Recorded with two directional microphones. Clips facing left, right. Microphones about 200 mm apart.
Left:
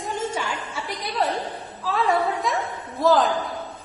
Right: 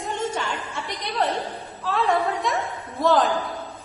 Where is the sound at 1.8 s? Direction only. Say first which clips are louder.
Even; centre (ahead or behind).